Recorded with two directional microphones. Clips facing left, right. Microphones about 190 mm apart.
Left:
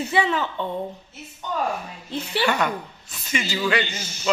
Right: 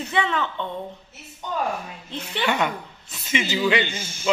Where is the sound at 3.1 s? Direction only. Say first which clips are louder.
Right 2 dB; 20° right (ahead or behind).